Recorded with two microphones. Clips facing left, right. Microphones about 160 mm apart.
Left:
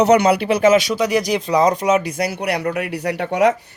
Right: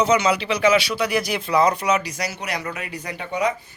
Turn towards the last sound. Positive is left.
turn(degrees=75)  # may be behind; listen again after turning